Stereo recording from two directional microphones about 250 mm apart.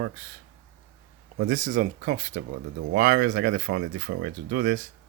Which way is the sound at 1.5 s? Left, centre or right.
Right.